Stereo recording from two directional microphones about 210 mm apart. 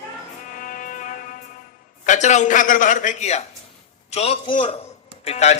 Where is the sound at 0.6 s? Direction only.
40° left (ahead or behind).